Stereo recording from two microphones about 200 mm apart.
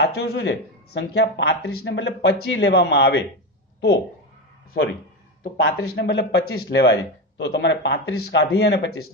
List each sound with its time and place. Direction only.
0.0 s speech: 55° left (ahead or behind)
5.4 s speech: 50° left (ahead or behind); by 9.1 s 75° left (ahead or behind)